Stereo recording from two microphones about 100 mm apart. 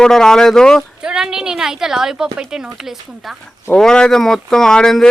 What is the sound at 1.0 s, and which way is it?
Speech, 5° right (ahead or behind).